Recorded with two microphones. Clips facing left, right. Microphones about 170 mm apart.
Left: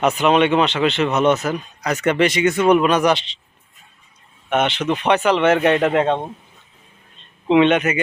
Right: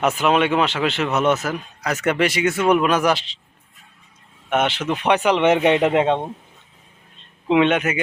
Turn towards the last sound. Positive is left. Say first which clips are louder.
# left 3 dB
turn(degrees=-5)  # may be behind; listen again after turning